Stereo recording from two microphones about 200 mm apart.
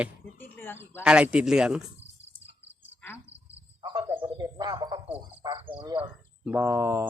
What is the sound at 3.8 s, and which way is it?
Cricket, 20° right (ahead or behind).